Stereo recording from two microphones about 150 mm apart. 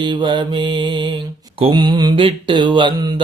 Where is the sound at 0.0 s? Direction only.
30° right (ahead or behind).